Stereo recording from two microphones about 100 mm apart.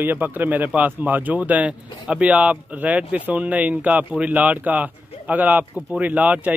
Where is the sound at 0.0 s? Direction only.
20° right (ahead or behind).